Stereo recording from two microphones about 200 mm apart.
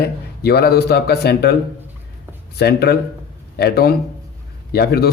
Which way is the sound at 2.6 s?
55° left (ahead or behind).